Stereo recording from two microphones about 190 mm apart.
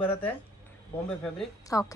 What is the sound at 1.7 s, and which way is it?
Speech, 15° left (ahead or behind).